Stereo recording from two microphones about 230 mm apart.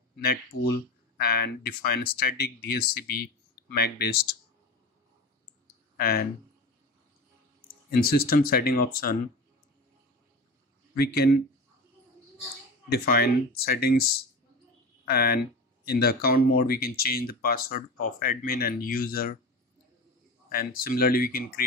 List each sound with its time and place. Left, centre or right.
0.5 s speech: left
1.1 s speech: left
5.9 s speech: left
7.9 s speech: left
11.0 s speech: left
12.9 s speech: left
15.0 s speech: left
20.4 s speech: left